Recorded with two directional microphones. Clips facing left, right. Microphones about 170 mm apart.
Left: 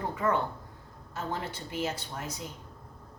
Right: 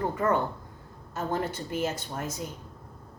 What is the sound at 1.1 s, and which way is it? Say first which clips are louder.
A woman's voice: right 5 dB; 45° right (ahead or behind).